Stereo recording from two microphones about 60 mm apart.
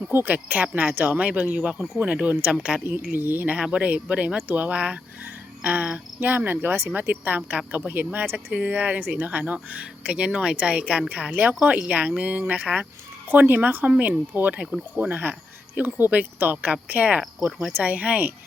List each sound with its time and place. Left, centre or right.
0.1 s speech: right
2.8 s speech: right
7.1 s speech: right
8.5 s speech: right